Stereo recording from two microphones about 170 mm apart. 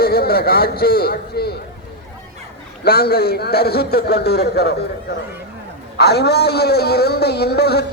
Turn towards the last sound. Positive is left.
turn(degrees=70)  # may be behind; listen again after turning